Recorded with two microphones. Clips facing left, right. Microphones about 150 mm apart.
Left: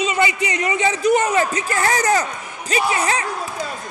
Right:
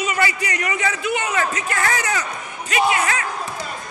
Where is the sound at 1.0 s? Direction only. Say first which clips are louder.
Left 8 dB; 40° left (ahead or behind).